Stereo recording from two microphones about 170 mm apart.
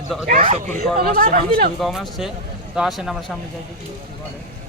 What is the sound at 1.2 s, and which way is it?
Speech, 60° right (ahead or behind).